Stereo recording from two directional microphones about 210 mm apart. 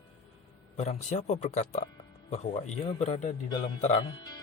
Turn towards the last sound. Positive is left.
turn(degrees=25)  # may be behind; listen again after turning